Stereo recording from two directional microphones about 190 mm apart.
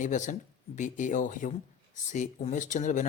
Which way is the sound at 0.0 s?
40° left (ahead or behind).